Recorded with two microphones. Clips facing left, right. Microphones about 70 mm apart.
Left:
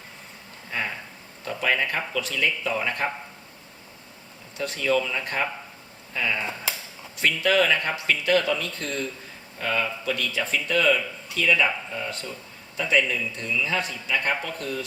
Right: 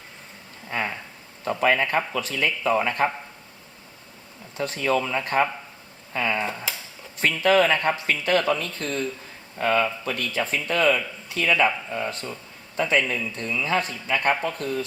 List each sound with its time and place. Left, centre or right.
1.5 s a man's voice: right
4.5 s a man's voice: right